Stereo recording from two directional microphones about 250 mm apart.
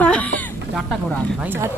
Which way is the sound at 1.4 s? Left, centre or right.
Centre.